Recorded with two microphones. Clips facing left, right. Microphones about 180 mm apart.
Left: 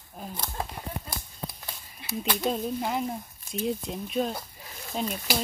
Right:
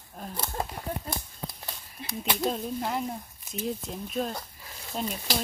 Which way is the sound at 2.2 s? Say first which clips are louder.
Left 1 dB; centre (ahead or behind).